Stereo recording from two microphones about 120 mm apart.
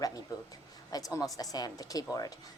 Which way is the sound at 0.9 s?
30° left (ahead or behind).